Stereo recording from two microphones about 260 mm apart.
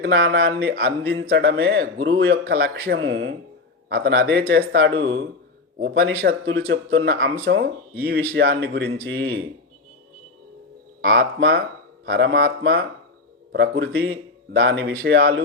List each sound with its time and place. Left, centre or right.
0.0 s a man's voice: right
9.0 s a man's voice: right
11.0 s a man's voice: right